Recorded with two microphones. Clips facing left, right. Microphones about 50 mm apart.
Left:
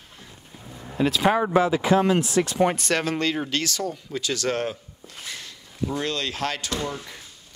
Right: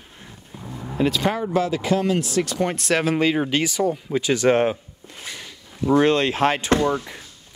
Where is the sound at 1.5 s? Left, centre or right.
Left.